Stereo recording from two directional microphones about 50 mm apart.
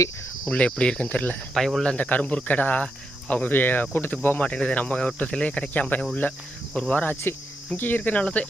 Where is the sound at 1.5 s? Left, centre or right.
Centre.